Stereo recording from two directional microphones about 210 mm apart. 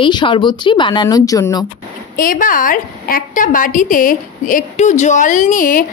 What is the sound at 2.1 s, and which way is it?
A woman's voice, 40° left (ahead or behind).